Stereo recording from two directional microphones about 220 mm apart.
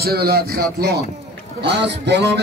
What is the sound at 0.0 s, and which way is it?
Speech, 45° right (ahead or behind).